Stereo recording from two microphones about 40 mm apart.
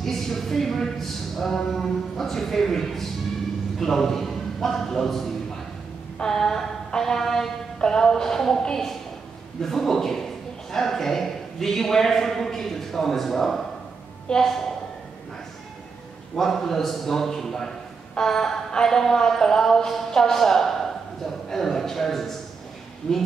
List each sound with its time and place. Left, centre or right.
0.0 s a sound: centre
1.6 s a man's voice: centre
7.0 s music: centre
9.6 s a man's voice: centre
16.3 s a man's voice: centre
23.0 s speech: left